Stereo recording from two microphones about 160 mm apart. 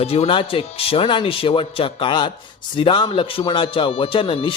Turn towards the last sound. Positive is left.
turn(degrees=35)  # may be behind; listen again after turning